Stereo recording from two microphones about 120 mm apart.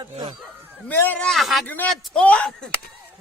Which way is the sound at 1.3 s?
Centre (ahead or behind).